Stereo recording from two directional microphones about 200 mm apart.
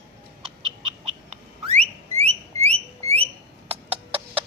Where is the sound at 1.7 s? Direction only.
30° right (ahead or behind).